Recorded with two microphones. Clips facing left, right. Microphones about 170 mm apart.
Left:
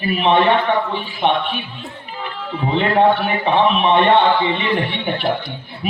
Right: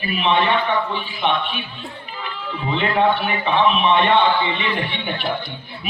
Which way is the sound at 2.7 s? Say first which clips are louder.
Left 4 dB; 40° left (ahead or behind).